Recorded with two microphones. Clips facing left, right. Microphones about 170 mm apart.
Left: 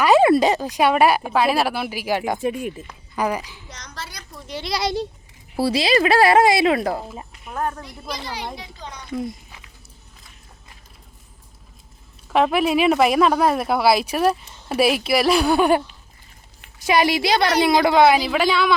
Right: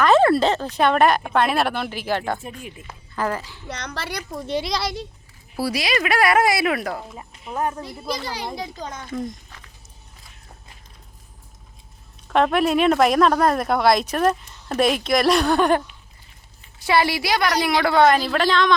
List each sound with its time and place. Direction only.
0.0 s a woman's voice: 10° left (ahead or behind)
3.7 s a child's voice: 65° right (ahead or behind)
4.8 s speech: 25° left (ahead or behind)
7.5 s speech: 10° right (ahead or behind)
8.5 s a child's voice: 40° right (ahead or behind)
9.1 s a sound: 5° left (ahead or behind)
12.3 s a woman's voice: 5° left (ahead or behind)
16.8 s a woman's voice: 20° left (ahead or behind)